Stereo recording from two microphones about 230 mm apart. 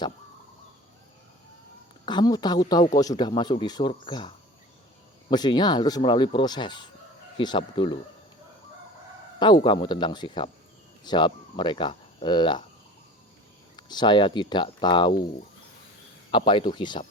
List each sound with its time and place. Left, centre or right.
2.0 s speech: centre
5.3 s speech: centre
9.6 s speech: centre
13.7 s speech: centre
16.3 s speech: left